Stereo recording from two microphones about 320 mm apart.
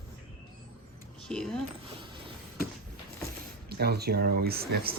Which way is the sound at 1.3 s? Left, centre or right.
Centre.